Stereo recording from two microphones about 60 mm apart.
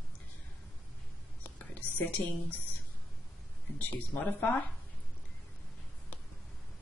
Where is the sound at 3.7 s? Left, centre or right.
Left.